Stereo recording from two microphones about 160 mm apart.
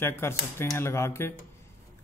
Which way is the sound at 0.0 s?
15° left (ahead or behind).